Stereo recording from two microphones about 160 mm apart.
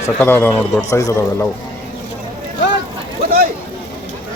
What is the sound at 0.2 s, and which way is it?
Speech, 10° left (ahead or behind).